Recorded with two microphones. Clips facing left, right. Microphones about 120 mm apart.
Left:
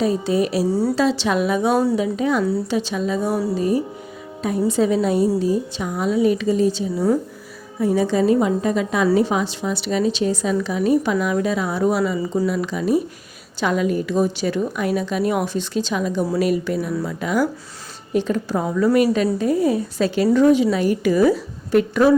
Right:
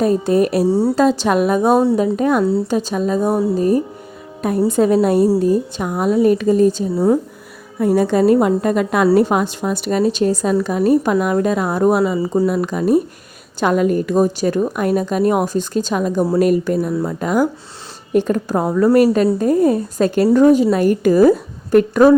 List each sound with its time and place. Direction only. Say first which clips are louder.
0.0 s a woman's voice: right 5 dB; 50° right (ahead or behind)
0.7 s speech: right 4 dB; 25° right (ahead or behind)
0.9 s a woman's voice: right 4 dB; 45° right (ahead or behind)
2.4 s speech: right 4 dB; 25° right (ahead or behind)
2.6 s a woman's voice: right 4 dB; 45° right (ahead or behind)
6.9 s speech: right 4 dB; 25° right (ahead or behind)
7.8 s a woman's voice: right 4 dB; 55° right (ahead or behind)